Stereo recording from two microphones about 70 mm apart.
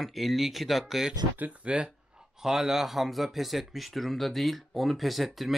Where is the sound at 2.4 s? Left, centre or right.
Centre.